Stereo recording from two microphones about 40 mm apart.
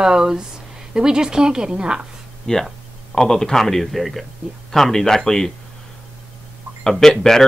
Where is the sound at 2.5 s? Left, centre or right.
Centre.